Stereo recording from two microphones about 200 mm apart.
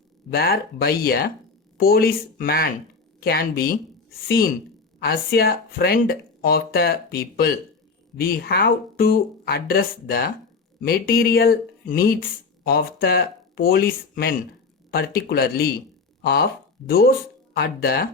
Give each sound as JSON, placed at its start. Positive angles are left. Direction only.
{"t": 0.3, "sound": "speech", "side_deg": 50}